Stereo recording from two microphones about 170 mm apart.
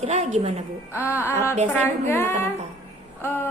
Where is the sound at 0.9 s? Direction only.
15° left (ahead or behind).